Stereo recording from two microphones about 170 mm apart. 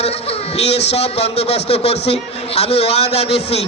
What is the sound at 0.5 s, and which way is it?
A man's voice, 40° left (ahead or behind).